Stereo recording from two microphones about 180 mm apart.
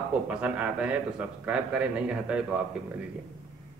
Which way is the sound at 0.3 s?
5° right (ahead or behind).